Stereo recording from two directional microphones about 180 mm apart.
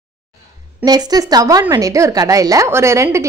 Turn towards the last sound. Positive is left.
turn(degrees=-15)  # may be behind; listen again after turning